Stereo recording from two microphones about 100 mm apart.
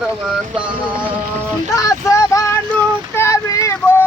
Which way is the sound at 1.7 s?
35° left (ahead or behind).